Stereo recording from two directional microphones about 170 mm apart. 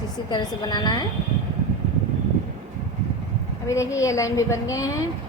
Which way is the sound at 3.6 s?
15° left (ahead or behind).